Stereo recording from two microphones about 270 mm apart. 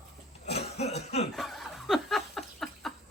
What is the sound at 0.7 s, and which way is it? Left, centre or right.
Cough, left.